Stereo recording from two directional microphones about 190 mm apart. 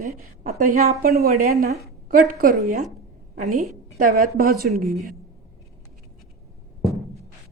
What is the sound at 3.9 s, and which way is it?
Speech, 50° right (ahead or behind).